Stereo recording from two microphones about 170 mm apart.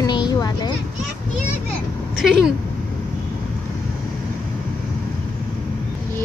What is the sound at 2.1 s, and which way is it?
Speech, 5° right (ahead or behind).